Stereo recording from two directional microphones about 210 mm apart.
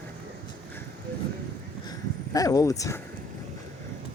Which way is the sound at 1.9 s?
15° left (ahead or behind).